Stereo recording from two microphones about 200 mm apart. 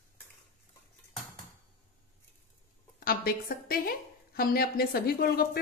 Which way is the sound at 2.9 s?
45° left (ahead or behind).